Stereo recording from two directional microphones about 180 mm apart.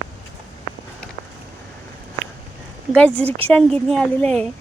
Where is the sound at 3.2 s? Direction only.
30° right (ahead or behind).